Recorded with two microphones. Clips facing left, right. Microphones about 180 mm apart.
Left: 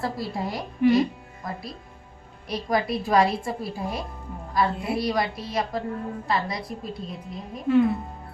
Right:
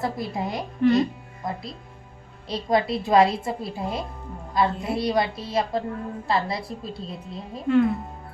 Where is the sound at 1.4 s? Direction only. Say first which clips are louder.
Right 3 dB; 25° right (ahead or behind).